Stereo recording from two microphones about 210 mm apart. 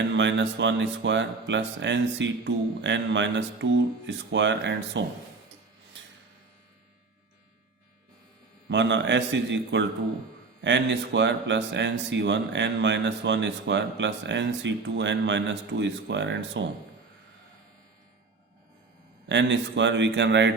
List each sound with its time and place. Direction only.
0.1 s speech: 60° right (ahead or behind)
8.7 s speech: 60° right (ahead or behind)
19.3 s speech: 60° right (ahead or behind)